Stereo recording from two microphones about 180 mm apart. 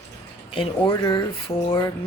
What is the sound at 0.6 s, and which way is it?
Speech, 20° left (ahead or behind).